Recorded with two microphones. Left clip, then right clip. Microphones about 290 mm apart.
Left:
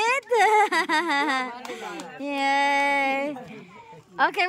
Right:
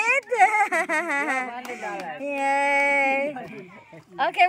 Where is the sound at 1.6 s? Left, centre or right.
Left.